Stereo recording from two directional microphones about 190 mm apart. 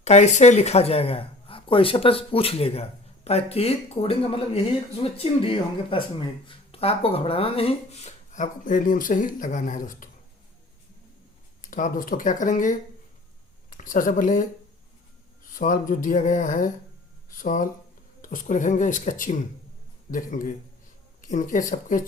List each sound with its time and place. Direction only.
0.0 s speech: 35° left (ahead or behind)
11.6 s speech: 45° left (ahead or behind)
15.4 s speech: 45° left (ahead or behind)